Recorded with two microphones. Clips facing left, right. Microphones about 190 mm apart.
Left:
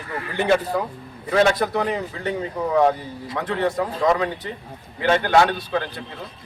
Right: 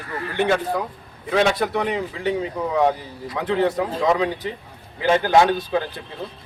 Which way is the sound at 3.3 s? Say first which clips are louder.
Right 2 dB; 5° right (ahead or behind).